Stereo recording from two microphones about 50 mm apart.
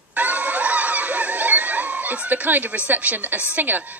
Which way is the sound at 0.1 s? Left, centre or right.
Right.